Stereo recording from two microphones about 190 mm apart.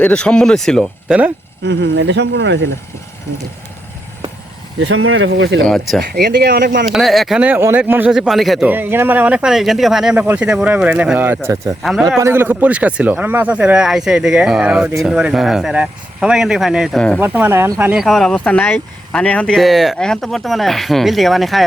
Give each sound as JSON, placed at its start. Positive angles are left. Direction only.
{"t": 0.0, "sound": "speech", "side_deg": 5}
{"t": 1.6, "sound": "speech", "side_deg": -65}
{"t": 4.8, "sound": "speech", "side_deg": -90}
{"t": 5.6, "sound": "speech", "side_deg": 0}
{"t": 6.1, "sound": "speech", "side_deg": -55}
{"t": 6.8, "sound": "speech", "side_deg": 0}
{"t": 12.2, "sound": "speech", "side_deg": -10}
{"t": 17.2, "sound": "speech", "side_deg": -10}